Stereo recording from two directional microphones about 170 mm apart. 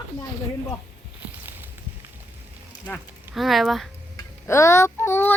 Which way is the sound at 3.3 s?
Centre (ahead or behind).